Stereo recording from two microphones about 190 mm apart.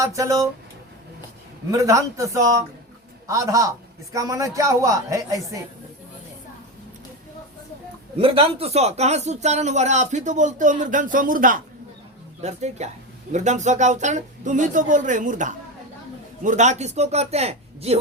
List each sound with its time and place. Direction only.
0.0 s a man's voice: 15° right (ahead or behind)
1.7 s a man's voice: 15° right (ahead or behind)
8.2 s speech: 30° right (ahead or behind)